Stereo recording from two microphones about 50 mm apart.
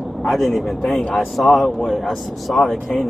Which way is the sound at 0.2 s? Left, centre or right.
Centre.